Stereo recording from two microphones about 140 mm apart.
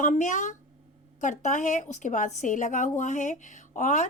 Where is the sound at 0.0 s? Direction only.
60° left (ahead or behind).